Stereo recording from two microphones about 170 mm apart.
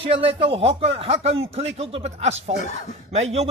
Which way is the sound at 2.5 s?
40° left (ahead or behind).